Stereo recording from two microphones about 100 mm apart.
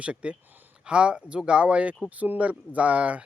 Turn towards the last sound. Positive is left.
turn(degrees=-10)  # may be behind; listen again after turning